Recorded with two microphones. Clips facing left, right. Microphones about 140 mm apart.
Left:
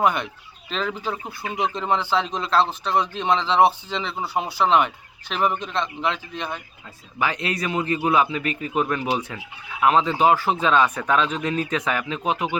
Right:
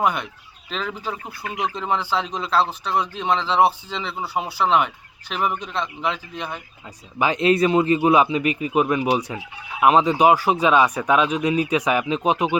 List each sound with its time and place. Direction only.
0.0 s speech: 5° right (ahead or behind)
7.2 s a man's voice: 20° right (ahead or behind)